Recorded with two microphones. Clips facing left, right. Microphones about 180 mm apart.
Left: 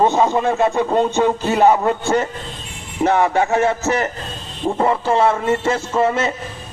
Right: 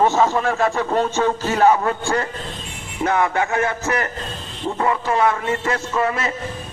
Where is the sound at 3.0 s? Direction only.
25° left (ahead or behind).